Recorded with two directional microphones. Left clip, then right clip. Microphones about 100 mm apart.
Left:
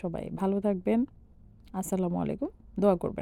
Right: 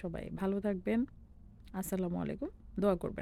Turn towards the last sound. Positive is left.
turn(degrees=30)  # may be behind; listen again after turning